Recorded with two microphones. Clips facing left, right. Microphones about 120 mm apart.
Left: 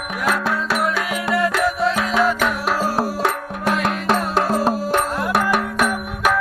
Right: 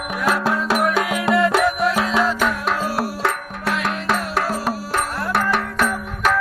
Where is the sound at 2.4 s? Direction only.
5° left (ahead or behind).